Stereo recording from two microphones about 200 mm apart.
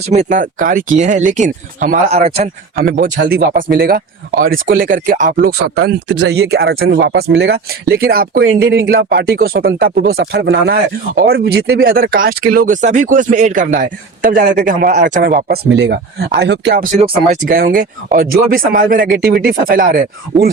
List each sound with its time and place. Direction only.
0.0 s speech: 35° right (ahead or behind)
2.8 s speech: 45° right (ahead or behind)